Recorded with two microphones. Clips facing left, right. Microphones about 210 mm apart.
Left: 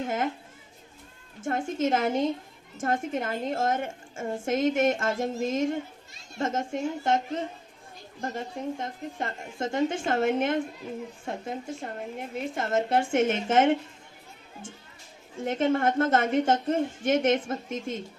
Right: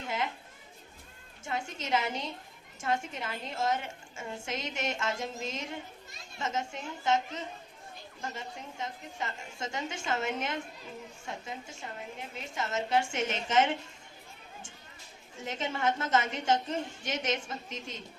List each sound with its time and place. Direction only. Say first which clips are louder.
0.0 s a woman's voice: left 6 dB; 50° left (ahead or behind)
1.4 s a woman's voice: left 10 dB; 50° left (ahead or behind)
15.4 s a woman's voice: left 10 dB; 55° left (ahead or behind)